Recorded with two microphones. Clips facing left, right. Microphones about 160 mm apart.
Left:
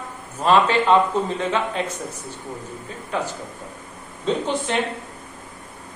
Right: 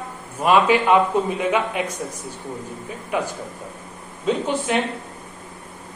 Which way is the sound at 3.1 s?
10° right (ahead or behind).